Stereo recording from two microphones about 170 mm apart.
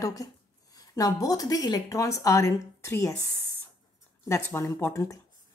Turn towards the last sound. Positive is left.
turn(degrees=15)  # may be behind; listen again after turning